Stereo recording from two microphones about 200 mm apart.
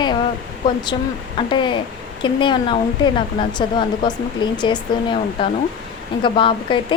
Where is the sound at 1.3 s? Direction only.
25° left (ahead or behind).